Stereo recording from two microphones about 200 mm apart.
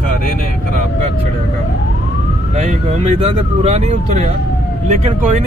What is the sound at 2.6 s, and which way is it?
Speech, 30° right (ahead or behind).